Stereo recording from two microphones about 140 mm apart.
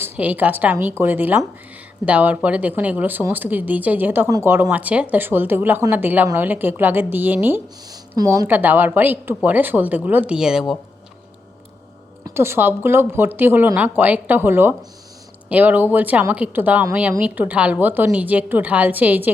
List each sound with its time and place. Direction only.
0.0 s a woman's voice: 10° right (ahead or behind)
8.2 s a woman's voice: 25° right (ahead or behind)
8.4 s a woman's voice: 15° right (ahead or behind)
12.2 s a woman's voice: 20° right (ahead or behind)